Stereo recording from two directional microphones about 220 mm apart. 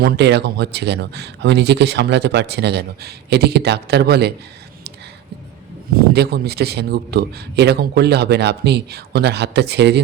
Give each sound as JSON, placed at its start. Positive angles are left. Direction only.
{"t": 0.0, "sound": "speech", "side_deg": -50}
{"t": 5.9, "sound": "speech", "side_deg": -45}